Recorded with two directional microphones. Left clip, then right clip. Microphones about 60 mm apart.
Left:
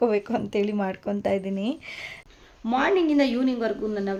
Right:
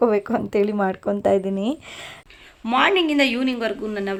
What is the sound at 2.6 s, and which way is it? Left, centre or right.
A woman's voice, centre.